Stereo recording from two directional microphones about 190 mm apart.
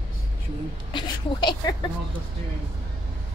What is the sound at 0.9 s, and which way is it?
Speech, 25° left (ahead or behind).